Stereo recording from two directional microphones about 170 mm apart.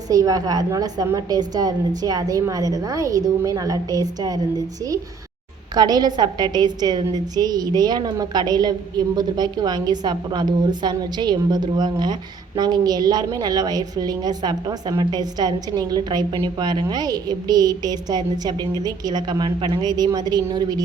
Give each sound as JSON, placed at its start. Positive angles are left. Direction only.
{"t": 0.1, "sound": "a woman's voice", "side_deg": -20}